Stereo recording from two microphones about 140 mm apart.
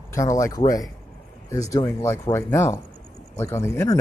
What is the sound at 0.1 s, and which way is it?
Speech, 20° left (ahead or behind).